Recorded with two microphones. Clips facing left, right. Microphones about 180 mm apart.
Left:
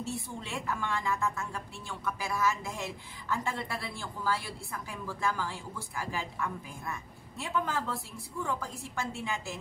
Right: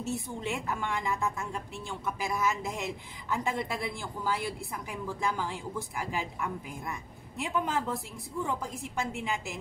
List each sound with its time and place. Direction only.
0.0 s a woman's voice: 20° right (ahead or behind)